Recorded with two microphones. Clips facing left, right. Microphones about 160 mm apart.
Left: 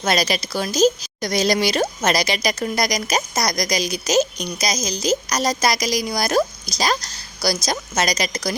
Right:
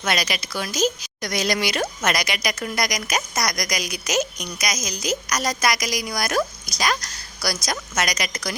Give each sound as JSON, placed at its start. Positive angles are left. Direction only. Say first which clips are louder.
{"t": 0.0, "sound": "a woman's voice", "louder": "left 5 dB", "side_deg": 35}